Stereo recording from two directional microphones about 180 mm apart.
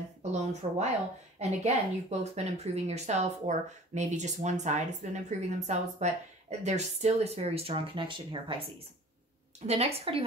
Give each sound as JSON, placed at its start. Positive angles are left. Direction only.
{"t": 0.2, "sound": "speech", "side_deg": -40}
{"t": 9.7, "sound": "speech", "side_deg": -35}